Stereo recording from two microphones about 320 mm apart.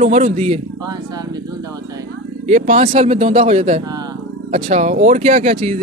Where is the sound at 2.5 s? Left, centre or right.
Right.